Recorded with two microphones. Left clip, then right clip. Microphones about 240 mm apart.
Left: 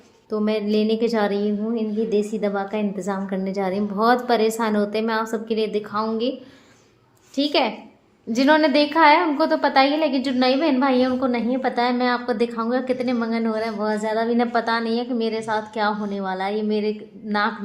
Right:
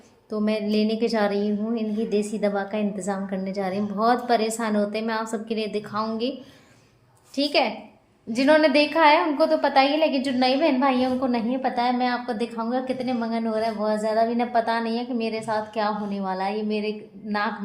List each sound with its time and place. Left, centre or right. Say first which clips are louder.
0.3 s a woman's voice: left 3 dB; centre
7.3 s a woman's voice: left 1 dB; centre